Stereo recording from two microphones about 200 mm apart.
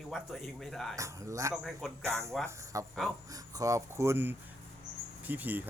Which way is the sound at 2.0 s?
15° right (ahead or behind).